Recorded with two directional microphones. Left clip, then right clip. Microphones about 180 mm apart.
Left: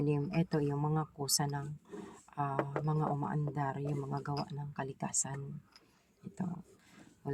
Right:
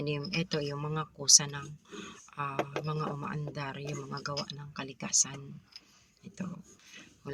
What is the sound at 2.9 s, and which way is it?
Speech, 50° left (ahead or behind).